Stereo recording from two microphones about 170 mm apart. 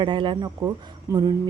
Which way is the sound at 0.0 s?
30° right (ahead or behind).